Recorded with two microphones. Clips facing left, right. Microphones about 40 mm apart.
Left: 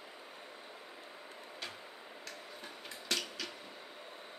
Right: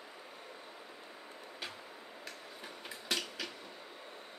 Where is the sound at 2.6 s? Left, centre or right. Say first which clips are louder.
Right 1 dB; centre.